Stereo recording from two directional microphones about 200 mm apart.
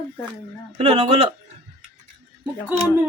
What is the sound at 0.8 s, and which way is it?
Speech, 30° right (ahead or behind).